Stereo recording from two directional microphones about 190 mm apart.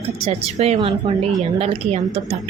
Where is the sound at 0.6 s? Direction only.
35° right (ahead or behind).